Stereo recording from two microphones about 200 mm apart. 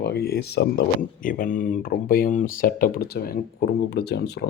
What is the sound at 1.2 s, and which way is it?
Speech, 40° left (ahead or behind).